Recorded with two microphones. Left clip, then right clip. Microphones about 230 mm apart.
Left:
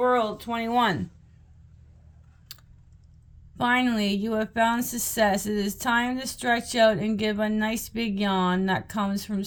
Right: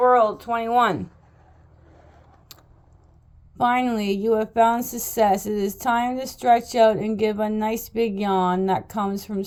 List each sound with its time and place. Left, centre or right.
0.0 s speech: left
2.5 s keys jangling: left
3.6 s speech: left